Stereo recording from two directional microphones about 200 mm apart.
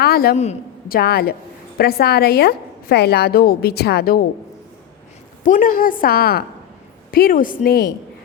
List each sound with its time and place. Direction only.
0.0 s a woman's voice: 50° left (ahead or behind)
5.4 s a woman's voice: 40° left (ahead or behind)